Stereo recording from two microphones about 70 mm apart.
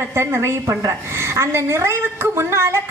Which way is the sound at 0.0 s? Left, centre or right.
Right.